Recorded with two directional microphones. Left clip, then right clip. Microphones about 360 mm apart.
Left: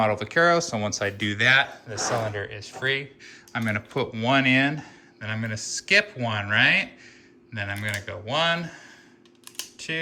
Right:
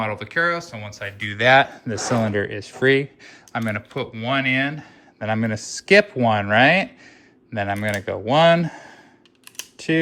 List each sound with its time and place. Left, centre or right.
0.0 s speech: centre
1.3 s speech: centre
1.7 s speech: right
3.5 s speech: centre
5.2 s speech: centre